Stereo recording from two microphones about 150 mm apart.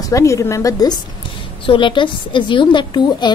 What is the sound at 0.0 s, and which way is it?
A woman's voice, 20° left (ahead or behind).